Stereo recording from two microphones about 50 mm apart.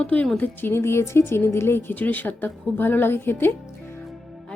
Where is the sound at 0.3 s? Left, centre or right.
Left.